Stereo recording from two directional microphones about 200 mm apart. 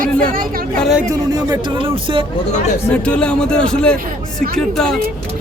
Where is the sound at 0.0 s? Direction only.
45° right (ahead or behind).